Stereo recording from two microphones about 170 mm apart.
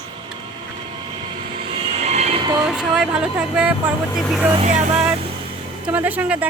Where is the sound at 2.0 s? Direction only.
40° right (ahead or behind).